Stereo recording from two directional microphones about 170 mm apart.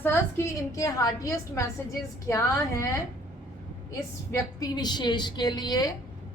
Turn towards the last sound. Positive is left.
turn(degrees=25)  # may be behind; listen again after turning